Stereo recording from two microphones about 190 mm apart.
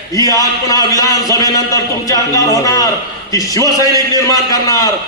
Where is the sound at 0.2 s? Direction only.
20° left (ahead or behind).